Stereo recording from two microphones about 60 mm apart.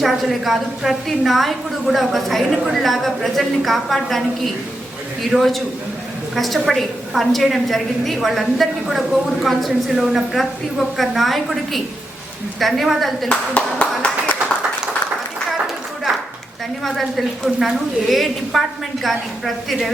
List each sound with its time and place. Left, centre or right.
0.0 s a woman's voice: centre
13.2 s clapping: left
16.8 s a woman's voice: centre